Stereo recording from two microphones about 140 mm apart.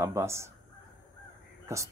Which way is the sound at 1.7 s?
20° right (ahead or behind).